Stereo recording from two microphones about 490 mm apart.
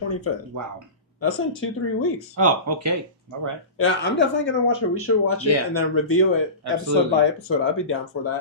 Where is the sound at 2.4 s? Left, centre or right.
Right.